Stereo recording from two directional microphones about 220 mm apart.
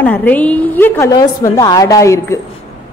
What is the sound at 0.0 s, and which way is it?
A woman's voice, 5° left (ahead or behind).